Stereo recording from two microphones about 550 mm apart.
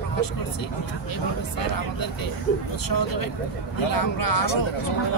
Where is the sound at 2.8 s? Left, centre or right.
Left.